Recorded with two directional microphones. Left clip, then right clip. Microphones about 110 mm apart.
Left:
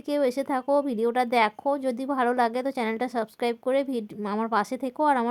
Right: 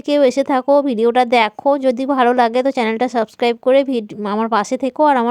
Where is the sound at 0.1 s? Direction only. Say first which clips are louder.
Right 11 dB; 35° right (ahead or behind).